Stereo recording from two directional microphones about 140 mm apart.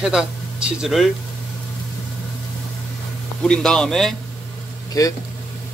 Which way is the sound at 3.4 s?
5° left (ahead or behind).